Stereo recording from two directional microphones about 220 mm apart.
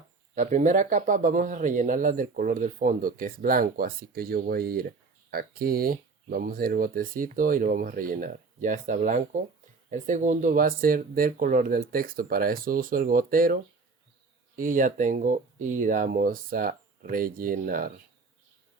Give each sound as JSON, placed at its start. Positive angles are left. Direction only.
{"t": 0.3, "sound": "speech", "side_deg": -35}